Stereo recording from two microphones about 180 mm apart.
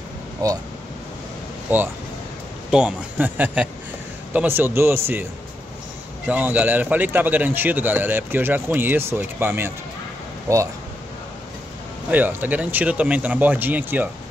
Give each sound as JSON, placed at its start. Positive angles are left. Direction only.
{"t": 0.4, "sound": "speech", "side_deg": -20}
{"t": 1.7, "sound": "speech", "side_deg": -10}
{"t": 6.2, "sound": "speech", "side_deg": -10}
{"t": 12.1, "sound": "speech", "side_deg": -10}